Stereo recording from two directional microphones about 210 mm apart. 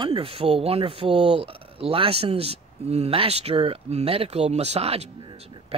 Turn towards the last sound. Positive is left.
turn(degrees=-25)  # may be behind; listen again after turning